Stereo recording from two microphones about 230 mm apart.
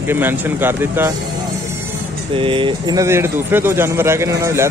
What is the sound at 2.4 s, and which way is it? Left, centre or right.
A man's voice, right.